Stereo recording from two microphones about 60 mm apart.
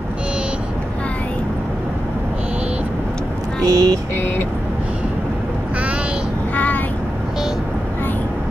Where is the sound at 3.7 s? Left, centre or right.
Right.